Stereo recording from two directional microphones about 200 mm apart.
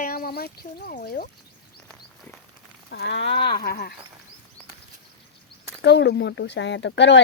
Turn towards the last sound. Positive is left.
turn(degrees=60)  # may be behind; listen again after turning